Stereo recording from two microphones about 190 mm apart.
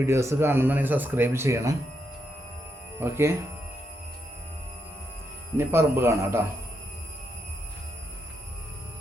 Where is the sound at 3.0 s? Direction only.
15° right (ahead or behind).